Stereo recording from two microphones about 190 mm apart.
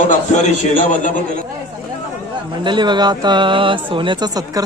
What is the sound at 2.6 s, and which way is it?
Speech, 25° right (ahead or behind).